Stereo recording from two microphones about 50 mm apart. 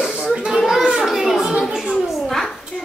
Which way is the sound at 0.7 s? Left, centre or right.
Centre.